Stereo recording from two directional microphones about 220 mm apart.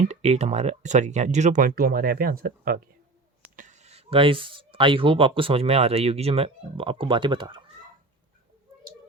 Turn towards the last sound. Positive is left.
turn(degrees=-20)  # may be behind; listen again after turning